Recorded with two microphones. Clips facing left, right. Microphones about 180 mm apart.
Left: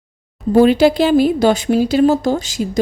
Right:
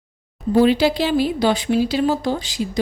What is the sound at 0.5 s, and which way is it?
A woman's voice, 50° left (ahead or behind).